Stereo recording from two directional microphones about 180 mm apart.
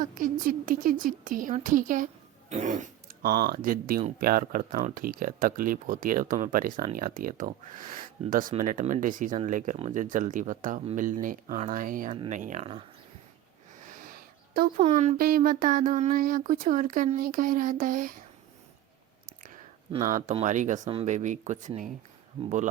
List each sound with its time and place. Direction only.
0.0 s speech: 50° right (ahead or behind)
13.7 s a sound: 45° right (ahead or behind)
14.8 s speech: 35° right (ahead or behind)
15.2 s speech: 50° right (ahead or behind)
19.9 s speech: 40° right (ahead or behind)
20.8 s speech: 30° right (ahead or behind)
21.1 s speech: 45° right (ahead or behind)